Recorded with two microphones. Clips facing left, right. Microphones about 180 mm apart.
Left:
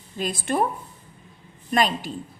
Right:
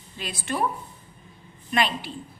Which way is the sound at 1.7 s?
45° left (ahead or behind).